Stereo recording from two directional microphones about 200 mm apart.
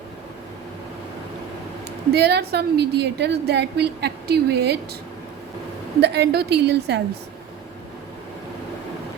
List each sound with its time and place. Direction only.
2.1 s a woman's voice: 55° right (ahead or behind)
6.0 s a woman's voice: 55° right (ahead or behind)